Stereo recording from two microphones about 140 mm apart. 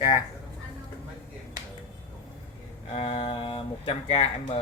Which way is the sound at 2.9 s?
45° left (ahead or behind).